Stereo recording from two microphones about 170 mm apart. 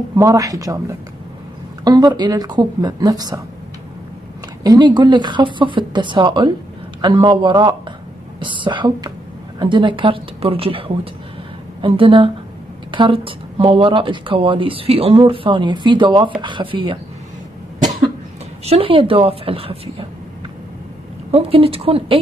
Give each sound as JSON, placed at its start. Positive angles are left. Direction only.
{"t": 0.1, "sound": "speech", "side_deg": -20}
{"t": 4.6, "sound": "speech", "side_deg": -25}
{"t": 18.7, "sound": "speech", "side_deg": -30}
{"t": 21.3, "sound": "speech", "side_deg": -35}